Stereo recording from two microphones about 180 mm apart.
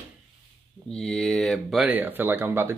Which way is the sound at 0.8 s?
5° left (ahead or behind).